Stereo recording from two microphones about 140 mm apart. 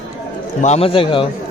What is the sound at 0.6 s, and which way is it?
Speech, 45° left (ahead or behind).